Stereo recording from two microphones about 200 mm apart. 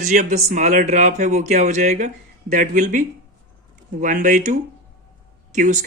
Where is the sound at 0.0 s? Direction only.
35° right (ahead or behind).